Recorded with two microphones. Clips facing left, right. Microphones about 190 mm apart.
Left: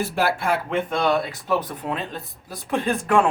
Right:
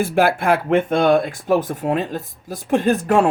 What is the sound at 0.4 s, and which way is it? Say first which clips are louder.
Speech: right 6 dB; 65° right (ahead or behind).